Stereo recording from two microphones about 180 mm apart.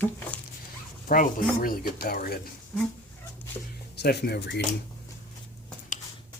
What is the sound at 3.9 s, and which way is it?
Speech, 65° left (ahead or behind).